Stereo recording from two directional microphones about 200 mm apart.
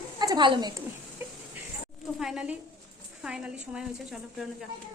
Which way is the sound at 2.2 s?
5° right (ahead or behind).